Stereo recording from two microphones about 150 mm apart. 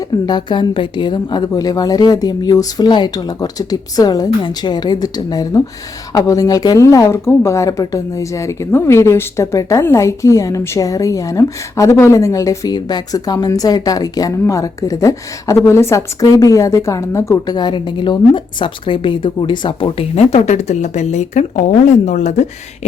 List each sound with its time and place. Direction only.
0.3 s speech: 30° left (ahead or behind); by 22.9 s 50° left (ahead or behind)